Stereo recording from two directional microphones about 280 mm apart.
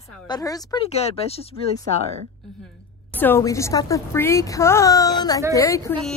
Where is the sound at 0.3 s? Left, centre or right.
Centre.